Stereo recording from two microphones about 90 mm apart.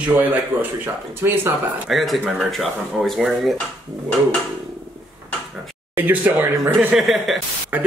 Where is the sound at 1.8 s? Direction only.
Centre (ahead or behind).